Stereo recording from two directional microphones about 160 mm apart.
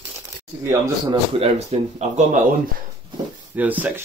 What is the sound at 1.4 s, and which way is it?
Speech, 40° right (ahead or behind).